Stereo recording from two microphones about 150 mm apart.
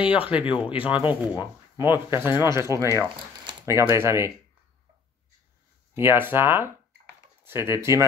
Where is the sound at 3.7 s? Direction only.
15° right (ahead or behind).